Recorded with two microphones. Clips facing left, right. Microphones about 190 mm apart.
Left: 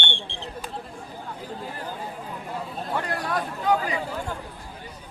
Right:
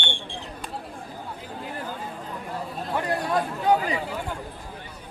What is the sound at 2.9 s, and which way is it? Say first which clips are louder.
Chatter: right 3 dB; 20° right (ahead or behind).